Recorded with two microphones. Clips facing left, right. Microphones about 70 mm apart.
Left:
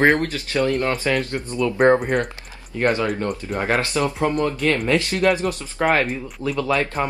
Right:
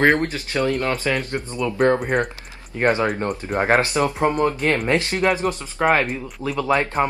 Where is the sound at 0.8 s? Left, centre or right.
Centre.